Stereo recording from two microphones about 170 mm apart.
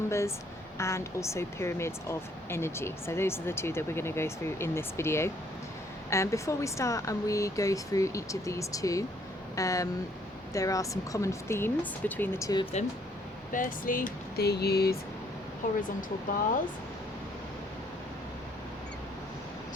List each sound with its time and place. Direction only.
0.1 s speech: 15° left (ahead or behind)
13.5 s speech: 50° left (ahead or behind); by 14.9 s 70° left (ahead or behind)
15.6 s speech: 55° left (ahead or behind)